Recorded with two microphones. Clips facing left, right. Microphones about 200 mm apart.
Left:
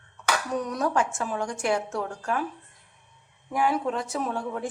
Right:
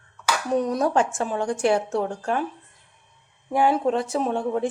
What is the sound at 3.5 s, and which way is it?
A woman's voice, 30° right (ahead or behind).